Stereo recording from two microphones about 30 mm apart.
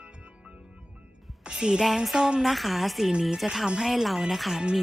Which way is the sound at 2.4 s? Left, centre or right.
Centre.